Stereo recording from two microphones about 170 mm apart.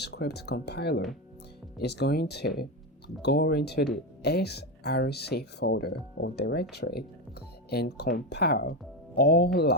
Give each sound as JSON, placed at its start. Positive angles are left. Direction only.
{"t": 0.0, "sound": "speech", "side_deg": 75}